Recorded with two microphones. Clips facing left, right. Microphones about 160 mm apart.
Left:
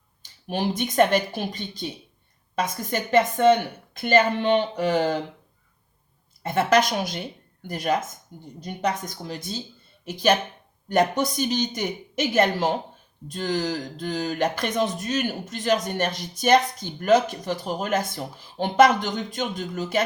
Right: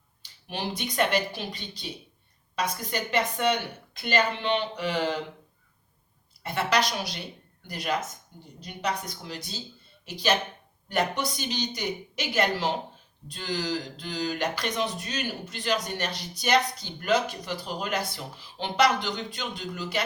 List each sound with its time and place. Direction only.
0.2 s speech: 45° left (ahead or behind)
6.4 s speech: 50° left (ahead or behind)